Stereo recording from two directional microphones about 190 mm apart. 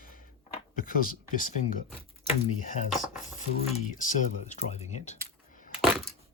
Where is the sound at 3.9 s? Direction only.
40° left (ahead or behind).